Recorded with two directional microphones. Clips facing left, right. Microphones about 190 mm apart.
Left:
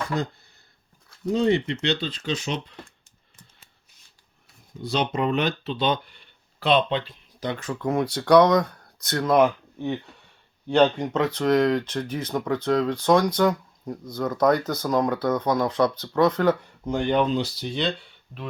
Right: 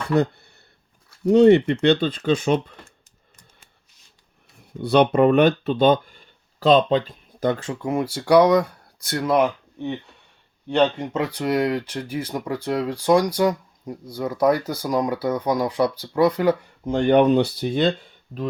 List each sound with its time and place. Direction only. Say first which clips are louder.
1.2 s speech: right 8 dB; 65° right (ahead or behind); by 2.9 s 50° right (ahead or behind)
4.8 s speech: right 9 dB; 60° right (ahead or behind)
7.8 s speech: even; 10° right (ahead or behind)
17.1 s speech: right 8 dB; 60° right (ahead or behind); by 18.4 s 45° right (ahead or behind)